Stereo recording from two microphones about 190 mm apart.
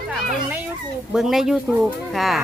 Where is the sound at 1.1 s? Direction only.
Centre (ahead or behind).